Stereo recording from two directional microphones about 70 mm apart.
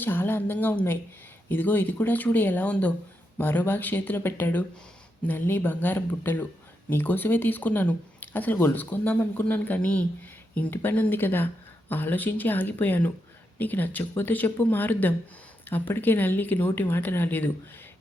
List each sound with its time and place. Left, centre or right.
0.0 s speech: left